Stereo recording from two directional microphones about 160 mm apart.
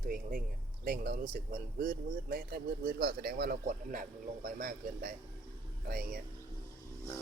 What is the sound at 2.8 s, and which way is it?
Speech, 75° right (ahead or behind).